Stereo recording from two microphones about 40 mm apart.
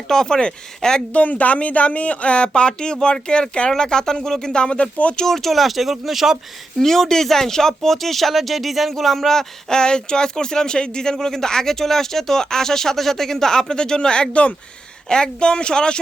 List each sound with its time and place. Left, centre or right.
0.1 s speech: centre
1.1 s speech: left
5.2 s speech: centre
6.7 s speech: centre